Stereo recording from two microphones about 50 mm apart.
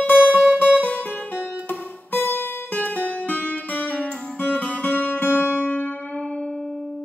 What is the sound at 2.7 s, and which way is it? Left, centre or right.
Music, left.